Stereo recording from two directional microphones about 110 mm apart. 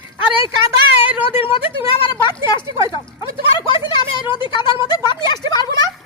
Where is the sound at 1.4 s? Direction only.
55° left (ahead or behind).